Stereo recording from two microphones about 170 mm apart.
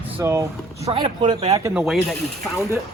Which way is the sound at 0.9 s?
30° right (ahead or behind).